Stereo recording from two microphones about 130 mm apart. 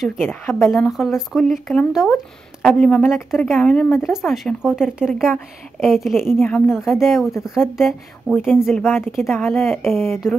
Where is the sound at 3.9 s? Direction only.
Centre (ahead or behind).